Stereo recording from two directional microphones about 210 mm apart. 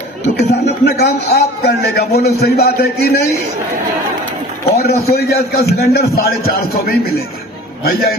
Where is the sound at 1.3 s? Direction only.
50° left (ahead or behind).